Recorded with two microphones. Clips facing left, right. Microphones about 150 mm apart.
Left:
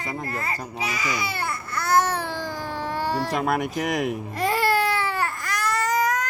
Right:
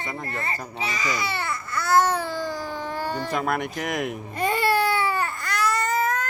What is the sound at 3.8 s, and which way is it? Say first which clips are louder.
Baby cry: left 3 dB; centre (ahead or behind).